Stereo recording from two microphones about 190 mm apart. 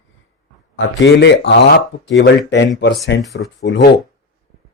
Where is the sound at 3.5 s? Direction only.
65° left (ahead or behind).